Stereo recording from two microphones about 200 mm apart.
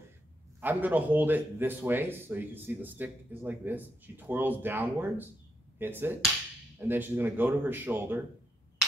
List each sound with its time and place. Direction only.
0.6 s speech: 10° right (ahead or behind)